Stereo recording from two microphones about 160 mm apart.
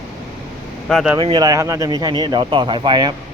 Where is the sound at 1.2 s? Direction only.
30° right (ahead or behind).